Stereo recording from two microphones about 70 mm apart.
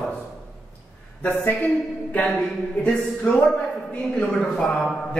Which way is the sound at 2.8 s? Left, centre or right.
Centre.